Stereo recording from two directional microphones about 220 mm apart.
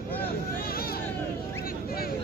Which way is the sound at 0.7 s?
45° left (ahead or behind).